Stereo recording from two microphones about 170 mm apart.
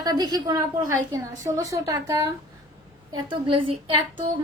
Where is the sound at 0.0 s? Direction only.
25° right (ahead or behind).